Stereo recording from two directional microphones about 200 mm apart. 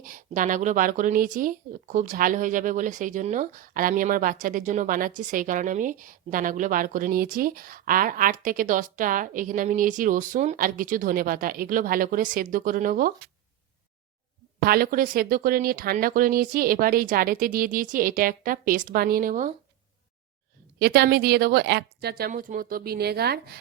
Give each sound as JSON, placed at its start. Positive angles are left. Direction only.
{"t": 0.0, "sound": "speech", "side_deg": -40}
{"t": 14.6, "sound": "speech", "side_deg": -50}
{"t": 20.7, "sound": "speech", "side_deg": -50}